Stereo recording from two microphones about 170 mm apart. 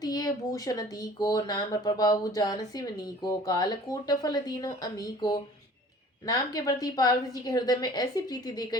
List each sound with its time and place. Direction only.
0.0 s speech: 20° left (ahead or behind)